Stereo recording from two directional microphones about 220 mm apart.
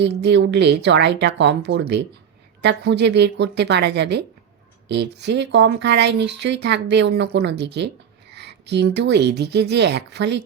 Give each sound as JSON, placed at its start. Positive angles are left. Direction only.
{"t": 0.0, "sound": "speech", "side_deg": -50}